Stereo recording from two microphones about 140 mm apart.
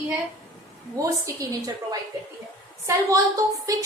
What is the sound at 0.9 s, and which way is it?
A woman's voice, 25° right (ahead or behind).